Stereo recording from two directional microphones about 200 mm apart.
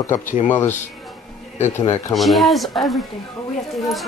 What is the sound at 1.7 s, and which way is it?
Speech, 15° left (ahead or behind).